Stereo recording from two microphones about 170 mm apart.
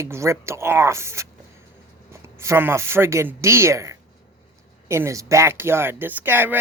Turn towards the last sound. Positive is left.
turn(degrees=-10)  # may be behind; listen again after turning